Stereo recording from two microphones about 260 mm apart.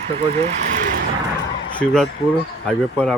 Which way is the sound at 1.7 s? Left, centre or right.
Centre.